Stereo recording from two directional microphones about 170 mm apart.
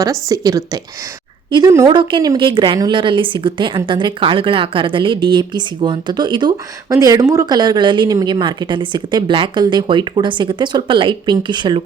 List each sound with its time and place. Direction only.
0.0 s a woman's voice: 20° right (ahead or behind)